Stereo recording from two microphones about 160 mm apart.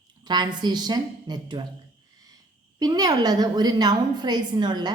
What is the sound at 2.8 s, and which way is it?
A woman's voice, 25° right (ahead or behind).